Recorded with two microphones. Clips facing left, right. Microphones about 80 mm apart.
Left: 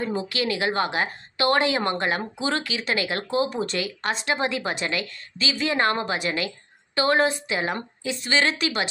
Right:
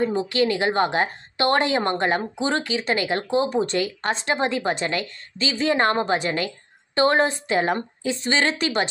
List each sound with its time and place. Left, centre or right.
0.3 s a woman's voice: right
3.7 s a woman's voice: right